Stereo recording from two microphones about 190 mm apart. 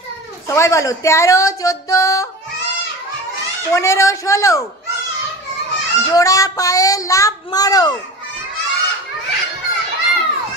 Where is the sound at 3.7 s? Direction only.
15° left (ahead or behind).